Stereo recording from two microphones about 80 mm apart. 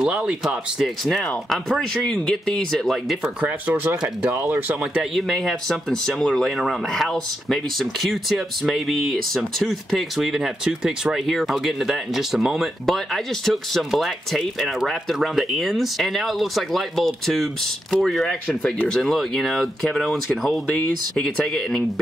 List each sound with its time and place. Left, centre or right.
0.0 s speech: centre
3.3 s speech: centre
5.1 s speech: centre